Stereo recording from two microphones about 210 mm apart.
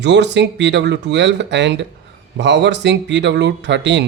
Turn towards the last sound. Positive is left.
turn(degrees=-55)  # may be behind; listen again after turning